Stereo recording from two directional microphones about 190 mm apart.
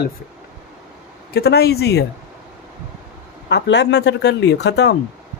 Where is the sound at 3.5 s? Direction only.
65° left (ahead or behind).